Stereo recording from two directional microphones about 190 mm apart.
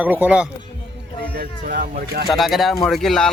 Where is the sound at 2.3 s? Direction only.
Centre (ahead or behind).